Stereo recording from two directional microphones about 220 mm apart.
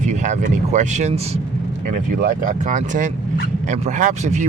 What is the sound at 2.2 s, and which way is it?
Speech, 35° right (ahead or behind).